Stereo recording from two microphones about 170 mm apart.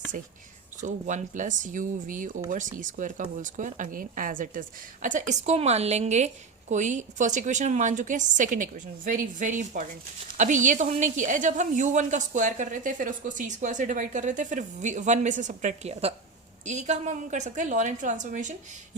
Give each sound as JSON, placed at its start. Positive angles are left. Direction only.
{"t": 0.8, "sound": "a woman's voice", "side_deg": -45}